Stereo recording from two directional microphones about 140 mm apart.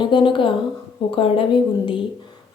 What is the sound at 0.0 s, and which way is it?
Speech, 35° left (ahead or behind).